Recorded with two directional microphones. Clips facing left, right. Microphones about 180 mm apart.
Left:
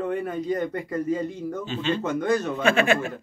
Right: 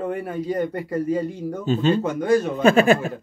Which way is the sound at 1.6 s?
40° right (ahead or behind).